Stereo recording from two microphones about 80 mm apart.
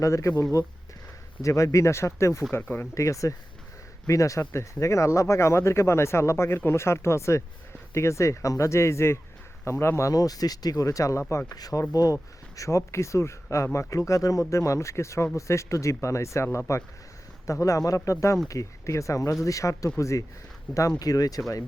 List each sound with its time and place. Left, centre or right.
0.0 s speech: left
2.5 s speech: left
2.9 s speech: left
10.1 s speech: left
11.5 s speech: left